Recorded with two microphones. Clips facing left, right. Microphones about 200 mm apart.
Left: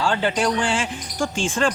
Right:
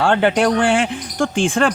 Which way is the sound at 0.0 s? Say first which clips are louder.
Right 6 dB; 60° right (ahead or behind).